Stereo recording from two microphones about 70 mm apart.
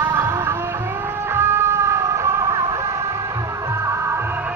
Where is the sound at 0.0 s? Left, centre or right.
Right.